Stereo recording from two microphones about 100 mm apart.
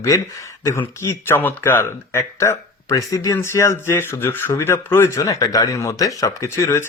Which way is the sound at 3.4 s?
25° left (ahead or behind).